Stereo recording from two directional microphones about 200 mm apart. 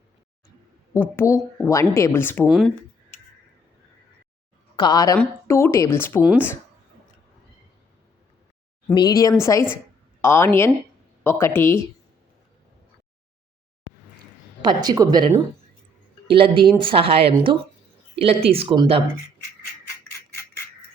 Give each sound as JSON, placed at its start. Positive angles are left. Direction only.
{"t": 0.9, "sound": "a woman's voice", "side_deg": 10}
{"t": 2.5, "sound": "speech", "side_deg": 0}
{"t": 4.8, "sound": "a woman's voice", "side_deg": 20}
{"t": 8.9, "sound": "a woman's voice", "side_deg": 20}
{"t": 14.6, "sound": "speech", "side_deg": -20}
{"t": 16.3, "sound": "speech", "side_deg": -25}